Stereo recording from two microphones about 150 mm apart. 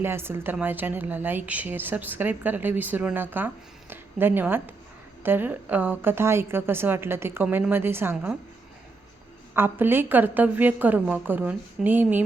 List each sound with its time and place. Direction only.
0.0 s a woman's voice: 15° right (ahead or behind)
9.6 s a woman's voice: 15° right (ahead or behind)